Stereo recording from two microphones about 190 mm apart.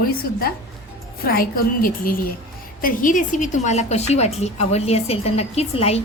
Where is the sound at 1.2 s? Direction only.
50° left (ahead or behind).